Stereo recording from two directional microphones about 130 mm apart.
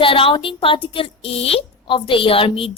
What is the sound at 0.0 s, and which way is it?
A woman's voice, 45° left (ahead or behind).